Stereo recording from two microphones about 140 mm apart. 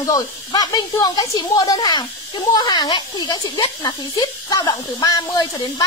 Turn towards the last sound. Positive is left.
turn(degrees=30)  # may be behind; listen again after turning